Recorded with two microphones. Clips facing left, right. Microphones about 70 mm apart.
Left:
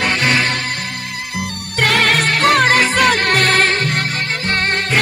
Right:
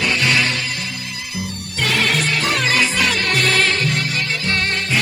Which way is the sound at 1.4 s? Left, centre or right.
Left.